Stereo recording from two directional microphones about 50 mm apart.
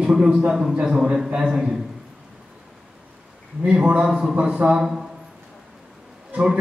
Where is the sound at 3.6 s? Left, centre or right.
Right.